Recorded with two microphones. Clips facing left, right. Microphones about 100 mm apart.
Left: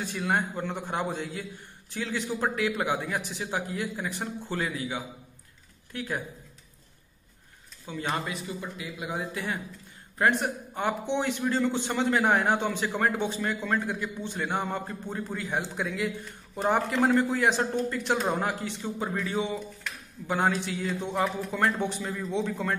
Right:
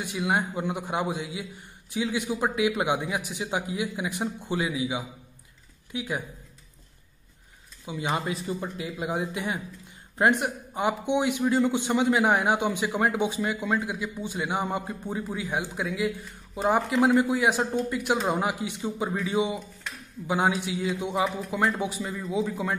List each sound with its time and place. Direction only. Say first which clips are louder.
0.0 s a man's voice: right 1 dB; 10° right (ahead or behind)
7.8 s speech: right 2 dB; 15° right (ahead or behind)
8.2 s speech: right 4 dB; 35° right (ahead or behind)
9.3 s a man's voice: right 2 dB; 15° right (ahead or behind)